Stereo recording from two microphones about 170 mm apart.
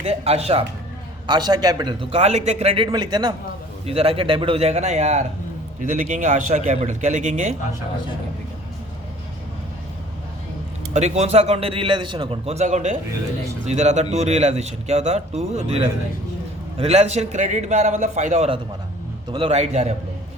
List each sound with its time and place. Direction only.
0.0 s speech: 40° right (ahead or behind)
1.3 s a man's voice: 25° right (ahead or behind)
3.8 s a man's voice: 35° right (ahead or behind)
10.9 s a man's voice: 40° right (ahead or behind)